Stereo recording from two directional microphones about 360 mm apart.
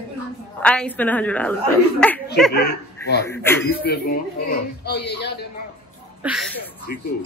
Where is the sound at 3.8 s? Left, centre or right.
Left.